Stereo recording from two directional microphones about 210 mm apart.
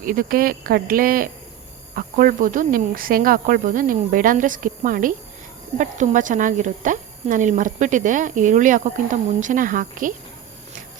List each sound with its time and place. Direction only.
0.0 s speech: 40° right (ahead or behind)